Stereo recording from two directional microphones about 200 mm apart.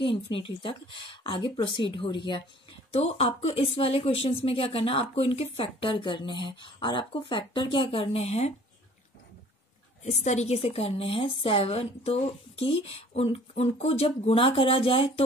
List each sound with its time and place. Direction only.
0.0 s speech: 25° left (ahead or behind)
10.0 s speech: 35° left (ahead or behind)